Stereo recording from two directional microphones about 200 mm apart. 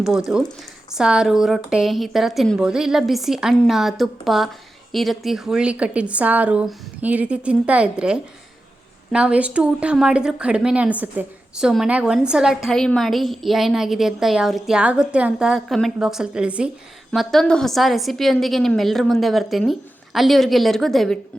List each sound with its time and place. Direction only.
0.0 s a woman's voice: centre (ahead or behind)